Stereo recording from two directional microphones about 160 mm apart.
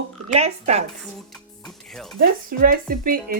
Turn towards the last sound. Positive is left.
turn(degrees=-65)  # may be behind; listen again after turning